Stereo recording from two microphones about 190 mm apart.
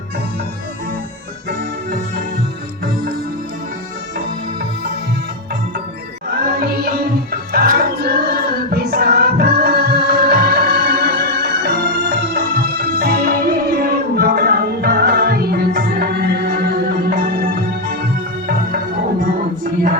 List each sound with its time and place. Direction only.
6.4 s music: 55° right (ahead or behind)